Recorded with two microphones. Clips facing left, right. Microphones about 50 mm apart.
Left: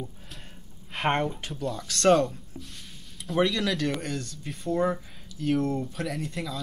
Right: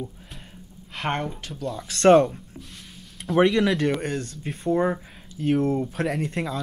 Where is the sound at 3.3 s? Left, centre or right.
Right.